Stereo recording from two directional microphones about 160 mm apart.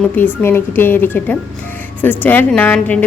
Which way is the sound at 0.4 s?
15° left (ahead or behind).